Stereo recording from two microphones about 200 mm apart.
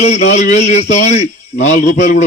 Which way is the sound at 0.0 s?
35° left (ahead or behind).